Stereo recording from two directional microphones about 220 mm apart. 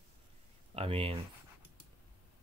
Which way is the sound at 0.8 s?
25° right (ahead or behind).